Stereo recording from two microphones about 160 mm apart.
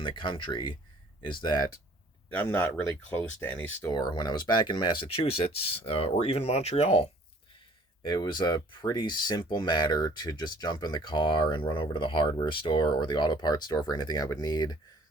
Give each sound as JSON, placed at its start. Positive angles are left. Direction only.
{"t": 0.0, "sound": "speech", "side_deg": 30}
{"t": 2.3, "sound": "speech", "side_deg": 10}
{"t": 3.9, "sound": "speech", "side_deg": 25}
{"t": 8.0, "sound": "speech", "side_deg": 25}